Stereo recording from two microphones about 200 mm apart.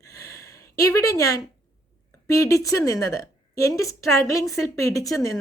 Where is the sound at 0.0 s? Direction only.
15° left (ahead or behind).